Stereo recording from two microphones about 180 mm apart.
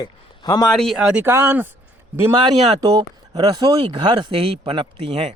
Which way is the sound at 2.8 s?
20° right (ahead or behind).